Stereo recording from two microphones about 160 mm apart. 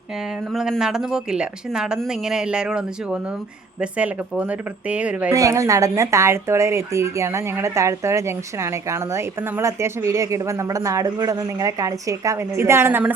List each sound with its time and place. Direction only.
0.5 s a woman's voice: 5° right (ahead or behind)
5.3 s speech: 20° right (ahead or behind)